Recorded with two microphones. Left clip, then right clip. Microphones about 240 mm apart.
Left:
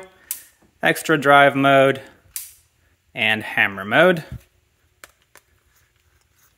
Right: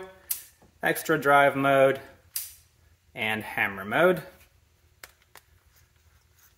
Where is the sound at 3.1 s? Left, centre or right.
Left.